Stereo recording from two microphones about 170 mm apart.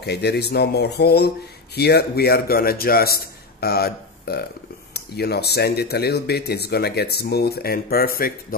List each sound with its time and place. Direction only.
0.0 s a man's voice: 75° left (ahead or behind)